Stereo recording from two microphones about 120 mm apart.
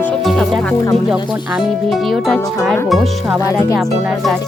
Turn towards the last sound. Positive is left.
turn(degrees=-5)  # may be behind; listen again after turning